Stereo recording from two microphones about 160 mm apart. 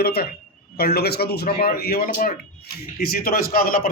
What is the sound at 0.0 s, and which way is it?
A man's voice, 75° left (ahead or behind).